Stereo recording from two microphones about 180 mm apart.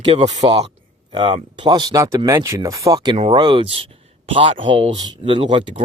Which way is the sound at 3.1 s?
35° right (ahead or behind).